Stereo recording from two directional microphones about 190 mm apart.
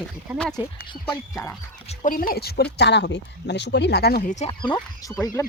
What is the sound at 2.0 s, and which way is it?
Speech, 50° left (ahead or behind).